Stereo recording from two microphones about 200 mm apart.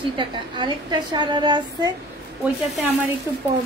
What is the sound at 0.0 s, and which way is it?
A woman's voice, 25° right (ahead or behind).